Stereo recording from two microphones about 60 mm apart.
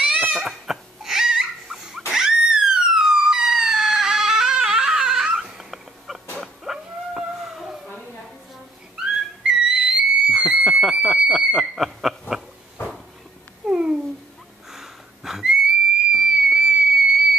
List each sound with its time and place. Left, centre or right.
0.0 s cat: right
0.4 s crying: centre
6.4 s a sound: centre
9.4 s whistle: centre
13.7 s babbling: centre
14.7 s a sound: centre
16.1 s fireworks: centre